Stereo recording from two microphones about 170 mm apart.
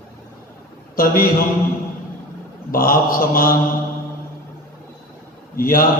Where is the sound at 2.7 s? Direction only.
60° left (ahead or behind).